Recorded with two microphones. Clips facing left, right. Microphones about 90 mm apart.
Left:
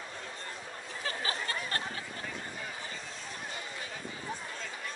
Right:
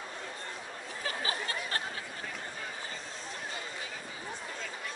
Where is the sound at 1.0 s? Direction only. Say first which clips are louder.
Even; 35° left (ahead or behind).